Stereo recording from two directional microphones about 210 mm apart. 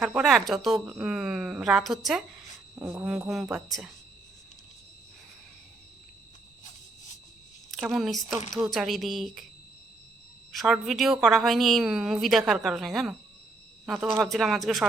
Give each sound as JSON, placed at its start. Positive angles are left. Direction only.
{"t": 0.0, "sound": "a woman's voice", "side_deg": 0}
{"t": 7.7, "sound": "a woman's voice", "side_deg": 0}
{"t": 10.5, "sound": "a woman's voice", "side_deg": 0}